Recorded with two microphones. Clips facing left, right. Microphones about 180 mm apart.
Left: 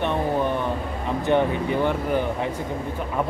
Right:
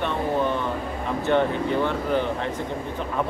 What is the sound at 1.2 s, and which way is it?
Speech, 15° left (ahead or behind).